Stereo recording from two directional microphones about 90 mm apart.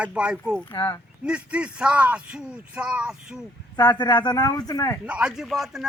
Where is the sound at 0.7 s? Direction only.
55° left (ahead or behind).